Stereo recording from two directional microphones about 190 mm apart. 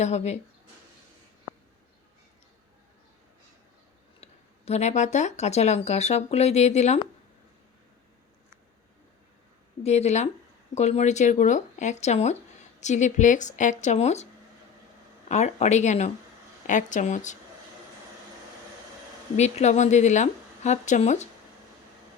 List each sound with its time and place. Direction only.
0.0 s speech: 35° left (ahead or behind)
4.2 s speech: 35° left (ahead or behind)
9.8 s speech: 35° left (ahead or behind)
15.3 s speech: 35° left (ahead or behind)
19.4 s speech: 35° left (ahead or behind)